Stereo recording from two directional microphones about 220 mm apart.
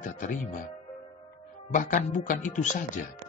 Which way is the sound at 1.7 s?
35° left (ahead or behind).